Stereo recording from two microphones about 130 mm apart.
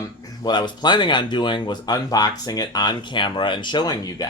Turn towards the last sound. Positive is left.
turn(degrees=30)  # may be behind; listen again after turning